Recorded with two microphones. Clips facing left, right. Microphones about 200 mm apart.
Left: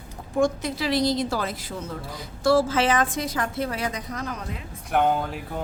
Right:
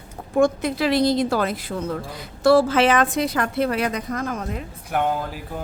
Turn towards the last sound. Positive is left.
turn(degrees=0)  # may be behind; listen again after turning